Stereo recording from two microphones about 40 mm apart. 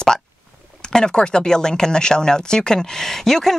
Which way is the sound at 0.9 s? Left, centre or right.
Centre.